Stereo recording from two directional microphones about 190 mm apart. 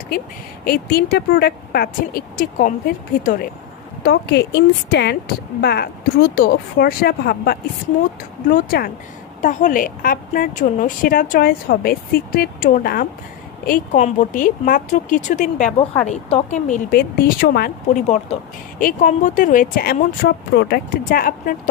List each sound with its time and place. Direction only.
0.6 s a woman's voice: 55° left (ahead or behind)
17.9 s speech: 35° left (ahead or behind)
18.8 s a woman's voice: 45° left (ahead or behind)